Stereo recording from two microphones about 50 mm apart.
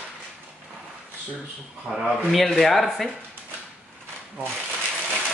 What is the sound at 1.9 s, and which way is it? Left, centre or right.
Speech, right.